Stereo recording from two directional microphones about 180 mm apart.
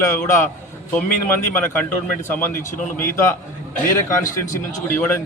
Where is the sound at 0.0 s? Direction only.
15° left (ahead or behind).